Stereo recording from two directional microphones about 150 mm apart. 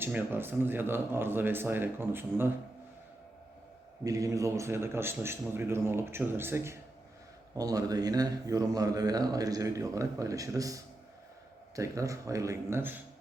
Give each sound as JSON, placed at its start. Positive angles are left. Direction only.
{"t": 0.0, "sound": "a man's voice", "side_deg": -15}
{"t": 4.0, "sound": "a man's voice", "side_deg": -20}